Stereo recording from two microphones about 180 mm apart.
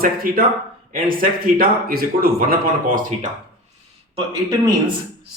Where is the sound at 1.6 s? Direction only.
55° right (ahead or behind).